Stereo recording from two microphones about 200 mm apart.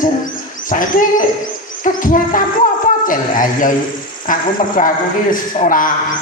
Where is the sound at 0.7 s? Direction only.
40° left (ahead or behind).